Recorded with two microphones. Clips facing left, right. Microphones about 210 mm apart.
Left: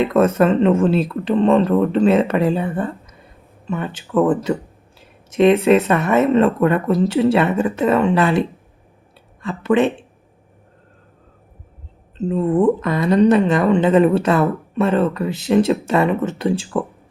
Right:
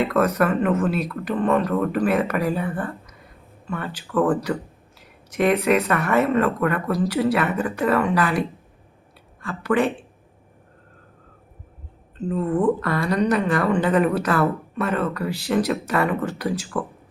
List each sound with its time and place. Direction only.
0.0 s speech: 25° left (ahead or behind)
12.1 s speech: 25° left (ahead or behind)